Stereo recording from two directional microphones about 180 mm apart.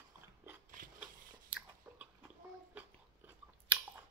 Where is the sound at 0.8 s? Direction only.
50° right (ahead or behind).